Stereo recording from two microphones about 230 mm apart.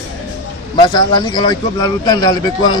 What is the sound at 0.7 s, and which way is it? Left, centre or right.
Speech, centre.